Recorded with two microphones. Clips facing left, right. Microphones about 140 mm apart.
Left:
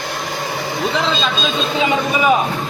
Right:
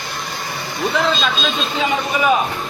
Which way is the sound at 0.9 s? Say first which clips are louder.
Right 2 dB; centre (ahead or behind).